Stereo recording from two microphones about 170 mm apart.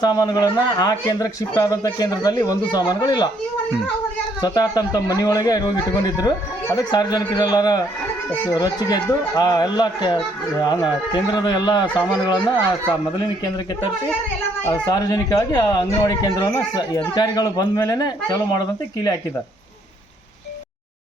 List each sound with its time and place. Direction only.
0.0 s speech: 25° left (ahead or behind)
4.4 s speech: 25° left (ahead or behind)
15.1 s speech: 20° left (ahead or behind)